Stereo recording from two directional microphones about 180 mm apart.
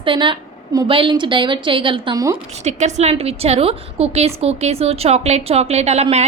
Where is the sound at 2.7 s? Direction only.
40° right (ahead or behind).